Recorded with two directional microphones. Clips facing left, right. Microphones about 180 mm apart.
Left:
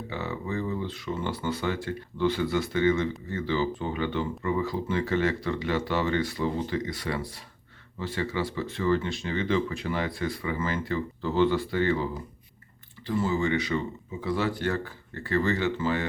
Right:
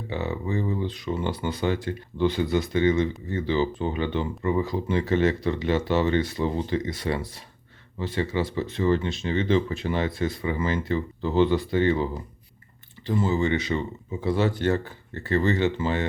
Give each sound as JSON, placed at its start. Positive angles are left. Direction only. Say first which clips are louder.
{"t": 0.1, "sound": "speech", "louder": "right 5 dB", "side_deg": -20}
{"t": 13.1, "sound": "speech", "louder": "right 3 dB", "side_deg": -25}